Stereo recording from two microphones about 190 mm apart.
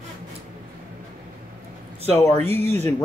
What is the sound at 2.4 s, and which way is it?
Speech, 10° left (ahead or behind).